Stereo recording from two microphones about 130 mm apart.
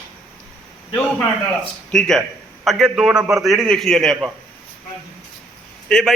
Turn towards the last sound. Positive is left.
turn(degrees=5)  # may be behind; listen again after turning